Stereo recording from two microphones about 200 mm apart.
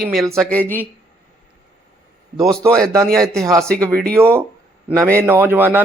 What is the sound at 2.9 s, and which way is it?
Speech, 5° left (ahead or behind).